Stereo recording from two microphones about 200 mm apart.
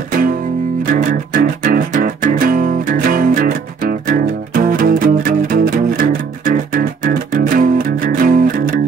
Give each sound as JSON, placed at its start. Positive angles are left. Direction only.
{"t": 0.9, "sound": "music", "side_deg": -40}